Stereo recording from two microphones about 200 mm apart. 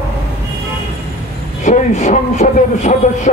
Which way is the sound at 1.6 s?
40° left (ahead or behind).